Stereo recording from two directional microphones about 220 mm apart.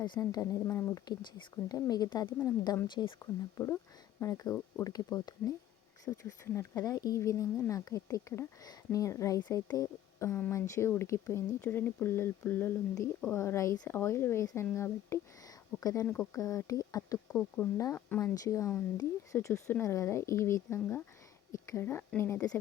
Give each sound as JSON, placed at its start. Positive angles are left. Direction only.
{"t": 0.0, "sound": "speech", "side_deg": 20}